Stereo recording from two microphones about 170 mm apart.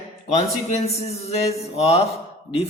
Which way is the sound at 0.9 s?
35° left (ahead or behind).